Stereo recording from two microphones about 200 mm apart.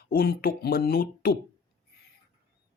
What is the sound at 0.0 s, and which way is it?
A man's voice, 50° left (ahead or behind).